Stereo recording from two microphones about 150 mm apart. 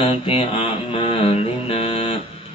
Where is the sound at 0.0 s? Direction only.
40° left (ahead or behind).